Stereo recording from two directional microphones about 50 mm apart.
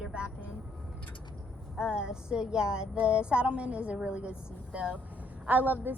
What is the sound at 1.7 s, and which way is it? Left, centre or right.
A woman's voice, centre.